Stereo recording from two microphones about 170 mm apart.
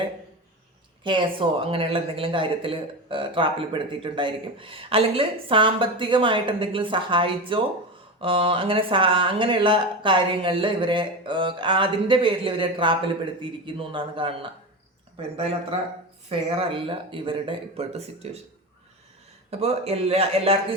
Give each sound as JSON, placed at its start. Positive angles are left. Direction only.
{"t": 1.0, "sound": "speech", "side_deg": -30}
{"t": 16.3, "sound": "speech", "side_deg": -30}
{"t": 19.5, "sound": "speech", "side_deg": -40}